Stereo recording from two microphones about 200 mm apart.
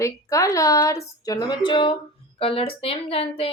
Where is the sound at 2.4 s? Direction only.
30° left (ahead or behind).